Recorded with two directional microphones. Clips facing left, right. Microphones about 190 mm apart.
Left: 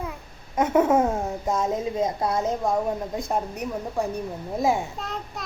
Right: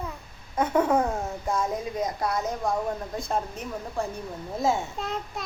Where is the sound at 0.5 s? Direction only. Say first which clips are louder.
Left 3 dB; 20° left (ahead or behind).